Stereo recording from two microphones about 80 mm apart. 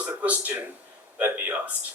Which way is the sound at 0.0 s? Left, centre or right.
Centre.